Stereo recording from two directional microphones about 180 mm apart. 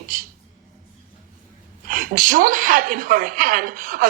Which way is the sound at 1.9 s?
50° right (ahead or behind).